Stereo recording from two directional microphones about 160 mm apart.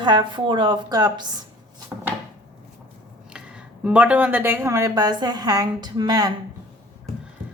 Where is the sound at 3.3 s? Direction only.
5° right (ahead or behind); by 6.3 s 25° right (ahead or behind).